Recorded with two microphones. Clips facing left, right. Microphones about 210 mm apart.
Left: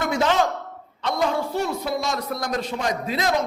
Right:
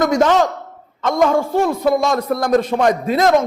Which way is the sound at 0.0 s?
45° right (ahead or behind).